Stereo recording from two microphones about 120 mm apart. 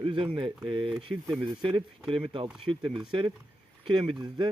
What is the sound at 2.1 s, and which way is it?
Speech, 45° right (ahead or behind).